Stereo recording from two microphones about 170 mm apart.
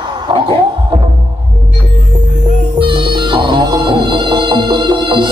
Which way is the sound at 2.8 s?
30° right (ahead or behind).